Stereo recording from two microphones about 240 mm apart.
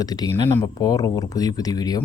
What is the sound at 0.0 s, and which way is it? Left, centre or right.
A man's voice, centre.